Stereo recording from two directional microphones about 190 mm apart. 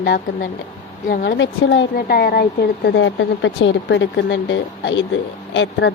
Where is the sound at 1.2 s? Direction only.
75° left (ahead or behind).